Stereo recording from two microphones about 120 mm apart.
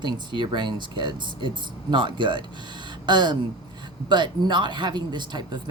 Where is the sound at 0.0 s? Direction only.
40° right (ahead or behind).